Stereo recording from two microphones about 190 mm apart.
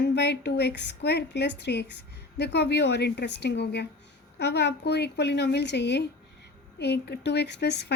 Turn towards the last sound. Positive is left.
turn(degrees=60)  # may be behind; listen again after turning